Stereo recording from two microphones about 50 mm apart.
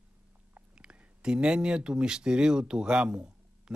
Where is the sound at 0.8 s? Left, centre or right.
Centre.